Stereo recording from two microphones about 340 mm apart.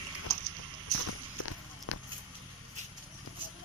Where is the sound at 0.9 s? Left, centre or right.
Left.